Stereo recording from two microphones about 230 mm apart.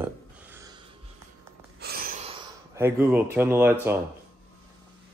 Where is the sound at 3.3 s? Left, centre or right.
Centre.